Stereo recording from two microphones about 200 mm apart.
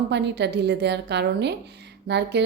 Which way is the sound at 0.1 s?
55° right (ahead or behind).